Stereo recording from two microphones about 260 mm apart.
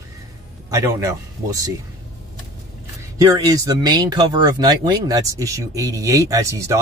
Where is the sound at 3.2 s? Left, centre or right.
Centre.